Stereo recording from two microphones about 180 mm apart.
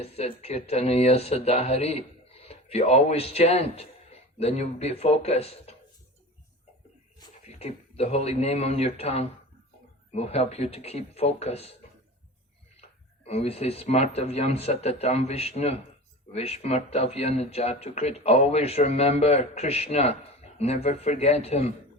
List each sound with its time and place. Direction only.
0.0 s speech: 35° left (ahead or behind)
7.4 s speech: 35° left (ahead or behind)
13.2 s speech: 35° left (ahead or behind)